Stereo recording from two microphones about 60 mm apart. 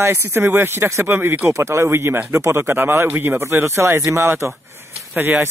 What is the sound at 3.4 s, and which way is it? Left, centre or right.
Speech, right.